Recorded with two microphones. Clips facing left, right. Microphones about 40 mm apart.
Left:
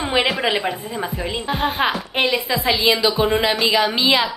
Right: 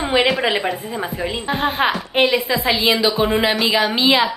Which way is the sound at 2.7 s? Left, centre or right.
Centre.